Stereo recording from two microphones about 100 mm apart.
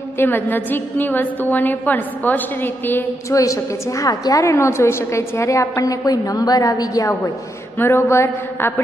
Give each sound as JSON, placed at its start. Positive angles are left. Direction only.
{"t": 0.2, "sound": "a woman's voice", "side_deg": 20}
{"t": 3.3, "sound": "a woman's voice", "side_deg": 35}
{"t": 7.8, "sound": "a woman's voice", "side_deg": 25}